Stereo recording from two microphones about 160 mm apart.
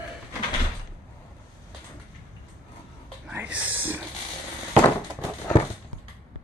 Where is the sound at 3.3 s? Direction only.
10° right (ahead or behind).